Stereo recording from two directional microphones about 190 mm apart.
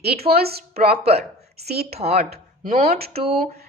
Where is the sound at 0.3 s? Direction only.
55° right (ahead or behind).